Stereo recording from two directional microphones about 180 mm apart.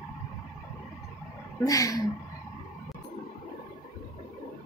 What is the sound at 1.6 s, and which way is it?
Speech, 20° left (ahead or behind).